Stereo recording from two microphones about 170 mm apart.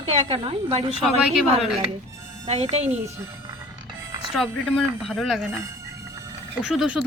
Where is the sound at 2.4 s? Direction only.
40° right (ahead or behind).